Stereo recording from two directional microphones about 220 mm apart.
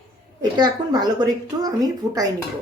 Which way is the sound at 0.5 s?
20° right (ahead or behind).